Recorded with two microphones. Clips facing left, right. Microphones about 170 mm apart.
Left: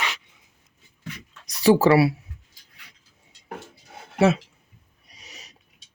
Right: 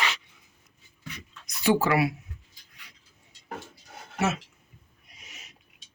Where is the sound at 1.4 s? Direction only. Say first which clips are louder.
Left 7 dB; 40° left (ahead or behind).